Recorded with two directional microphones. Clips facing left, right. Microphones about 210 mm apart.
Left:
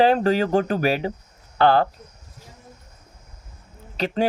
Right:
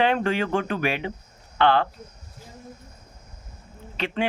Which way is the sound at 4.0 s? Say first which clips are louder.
Left 4 dB; 40° left (ahead or behind).